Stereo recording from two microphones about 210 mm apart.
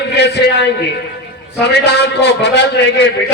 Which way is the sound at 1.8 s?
55° left (ahead or behind).